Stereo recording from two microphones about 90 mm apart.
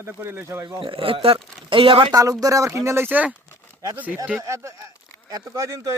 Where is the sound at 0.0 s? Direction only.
25° right (ahead or behind).